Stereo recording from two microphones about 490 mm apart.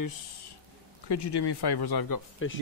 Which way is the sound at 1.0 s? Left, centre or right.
Left.